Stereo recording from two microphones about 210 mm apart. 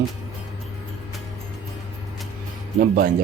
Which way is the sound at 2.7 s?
45° right (ahead or behind).